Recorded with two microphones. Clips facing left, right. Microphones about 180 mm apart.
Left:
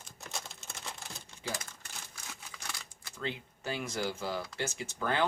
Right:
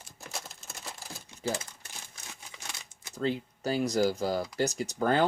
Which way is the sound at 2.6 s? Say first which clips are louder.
Left 1 dB; 20° right (ahead or behind).